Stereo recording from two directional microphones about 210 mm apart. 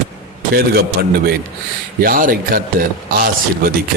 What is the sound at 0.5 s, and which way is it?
Speech, 45° right (ahead or behind).